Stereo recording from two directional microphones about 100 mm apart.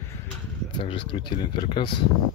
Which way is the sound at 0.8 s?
60° left (ahead or behind).